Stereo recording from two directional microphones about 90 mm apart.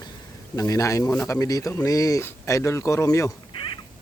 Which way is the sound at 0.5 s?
35° left (ahead or behind).